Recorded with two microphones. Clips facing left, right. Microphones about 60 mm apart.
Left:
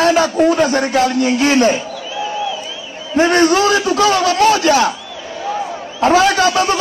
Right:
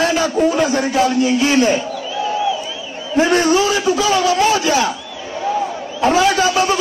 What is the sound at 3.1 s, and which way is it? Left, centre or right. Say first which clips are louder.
A man's voice: left 2 dB; left.